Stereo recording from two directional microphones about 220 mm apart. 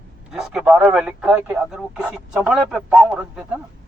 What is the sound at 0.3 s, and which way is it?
Speech, 5° right (ahead or behind).